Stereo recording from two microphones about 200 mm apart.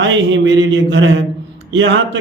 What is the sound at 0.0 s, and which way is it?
A man's voice, 70° right (ahead or behind).